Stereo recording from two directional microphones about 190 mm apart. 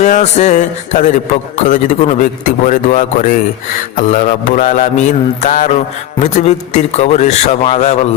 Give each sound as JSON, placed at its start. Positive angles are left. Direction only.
{"t": 0.0, "sound": "a man's voice", "side_deg": 40}